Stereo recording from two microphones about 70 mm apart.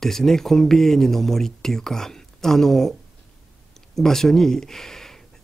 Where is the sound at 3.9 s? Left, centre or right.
Centre.